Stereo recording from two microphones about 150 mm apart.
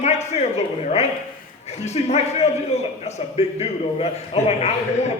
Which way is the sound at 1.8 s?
45° left (ahead or behind).